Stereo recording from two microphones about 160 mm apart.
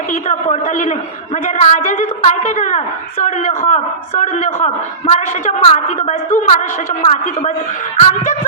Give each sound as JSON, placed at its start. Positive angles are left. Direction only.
{"t": 0.1, "sound": "a woman's voice", "side_deg": 50}